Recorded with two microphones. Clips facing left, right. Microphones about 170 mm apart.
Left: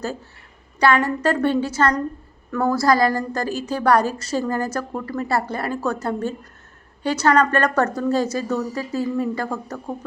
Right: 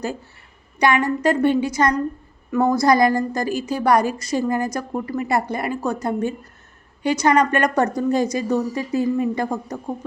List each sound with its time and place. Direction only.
1.0 s a woman's voice: 10° right (ahead or behind)